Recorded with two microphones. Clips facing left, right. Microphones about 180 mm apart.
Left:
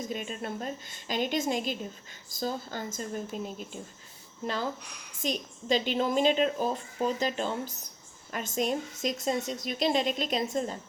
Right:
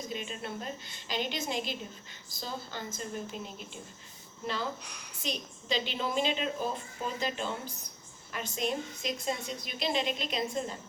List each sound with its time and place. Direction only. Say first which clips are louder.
0.1 s a woman's voice: left 3 dB; 45° left (ahead or behind)
5.2 s a woman's voice: left 5 dB; 45° left (ahead or behind)